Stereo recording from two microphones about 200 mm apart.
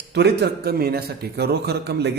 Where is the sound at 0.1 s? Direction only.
55° right (ahead or behind).